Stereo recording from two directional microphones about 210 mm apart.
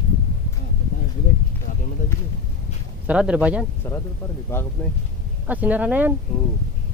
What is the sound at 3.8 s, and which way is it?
Speech, 10° left (ahead or behind).